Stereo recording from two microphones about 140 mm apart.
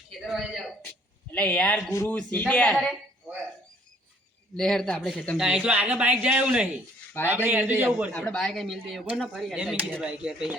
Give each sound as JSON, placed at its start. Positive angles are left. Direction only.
{"t": 0.1, "sound": "a man's voice", "side_deg": 0}
{"t": 0.9, "sound": "a sound", "side_deg": 10}
{"t": 1.9, "sound": "speech", "side_deg": 20}
{"t": 2.1, "sound": "speech", "side_deg": 10}
{"t": 4.5, "sound": "speech", "side_deg": 5}
{"t": 5.4, "sound": "speech", "side_deg": -5}
{"t": 8.1, "sound": "speech", "side_deg": 5}